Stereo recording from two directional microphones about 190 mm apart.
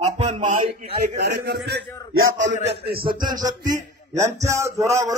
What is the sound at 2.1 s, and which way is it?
Speech, 80° right.